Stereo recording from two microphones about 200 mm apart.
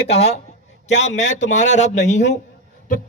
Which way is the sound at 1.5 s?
35° left (ahead or behind).